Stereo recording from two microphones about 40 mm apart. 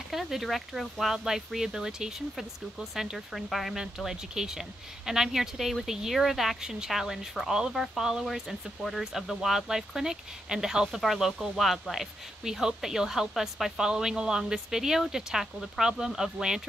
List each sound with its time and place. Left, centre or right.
0.1 s speech: centre
2.3 s speech: centre
3.7 s speech: centre
10.9 s speech: centre
13.7 s speech: centre